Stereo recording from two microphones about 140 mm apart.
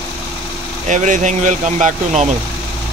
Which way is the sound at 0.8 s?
60° right (ahead or behind).